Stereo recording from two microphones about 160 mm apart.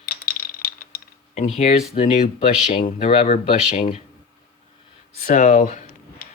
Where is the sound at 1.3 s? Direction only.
45° left (ahead or behind).